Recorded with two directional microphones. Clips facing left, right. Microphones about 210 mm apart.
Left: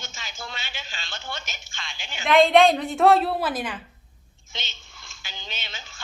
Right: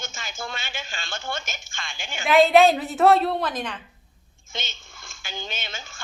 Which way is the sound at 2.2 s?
5° right (ahead or behind).